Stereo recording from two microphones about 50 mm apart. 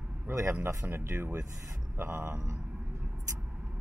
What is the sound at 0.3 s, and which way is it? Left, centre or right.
Speech, right.